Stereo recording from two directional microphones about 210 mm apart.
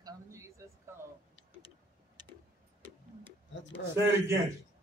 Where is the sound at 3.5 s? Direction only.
60° left (ahead or behind).